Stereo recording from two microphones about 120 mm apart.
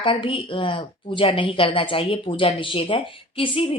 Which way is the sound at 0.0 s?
45° left (ahead or behind).